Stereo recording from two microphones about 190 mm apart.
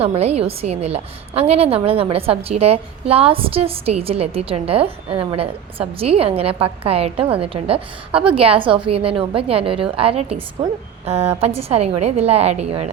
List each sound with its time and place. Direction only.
0.0 s a woman's voice: 30° right (ahead or behind)